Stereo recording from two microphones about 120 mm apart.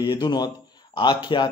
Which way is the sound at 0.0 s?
35° left (ahead or behind).